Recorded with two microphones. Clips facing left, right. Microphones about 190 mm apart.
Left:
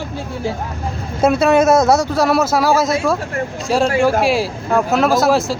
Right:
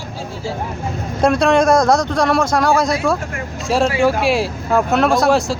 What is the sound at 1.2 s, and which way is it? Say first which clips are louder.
Speech: left 1 dB; 5° left (ahead or behind).